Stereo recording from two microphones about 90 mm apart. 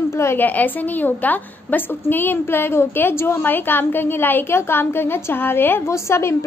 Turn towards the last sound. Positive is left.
turn(degrees=30)  # may be behind; listen again after turning